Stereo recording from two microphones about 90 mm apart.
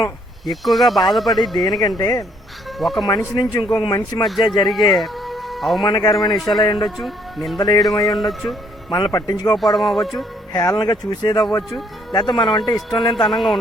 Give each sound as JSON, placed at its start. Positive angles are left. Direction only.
{"t": 0.4, "sound": "speech", "side_deg": 0}
{"t": 2.0, "sound": "speech", "side_deg": 40}
{"t": 2.7, "sound": "speech", "side_deg": 0}
{"t": 3.3, "sound": "a man's voice", "side_deg": 55}
{"t": 4.9, "sound": "music", "side_deg": 0}
{"t": 5.8, "sound": "a man's voice", "side_deg": 45}
{"t": 6.9, "sound": "speech", "side_deg": 0}
{"t": 8.9, "sound": "speech", "side_deg": 45}
{"t": 9.6, "sound": "speech", "side_deg": 0}
{"t": 10.5, "sound": "a man's voice", "side_deg": 45}
{"t": 13.1, "sound": "speech", "side_deg": 0}